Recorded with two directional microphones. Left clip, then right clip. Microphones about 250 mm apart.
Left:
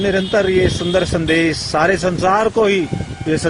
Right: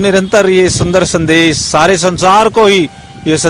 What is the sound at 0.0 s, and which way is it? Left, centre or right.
A man's voice, centre.